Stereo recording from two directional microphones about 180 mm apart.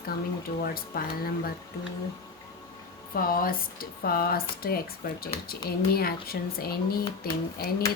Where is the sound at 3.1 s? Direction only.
55° left (ahead or behind).